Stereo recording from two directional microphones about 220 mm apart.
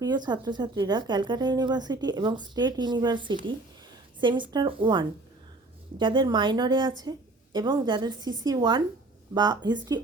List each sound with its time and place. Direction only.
0.0 s speech: 20° right (ahead or behind)